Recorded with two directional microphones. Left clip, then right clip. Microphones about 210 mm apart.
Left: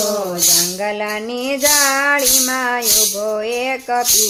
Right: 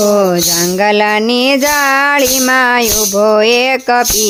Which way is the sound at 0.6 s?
55° right (ahead or behind).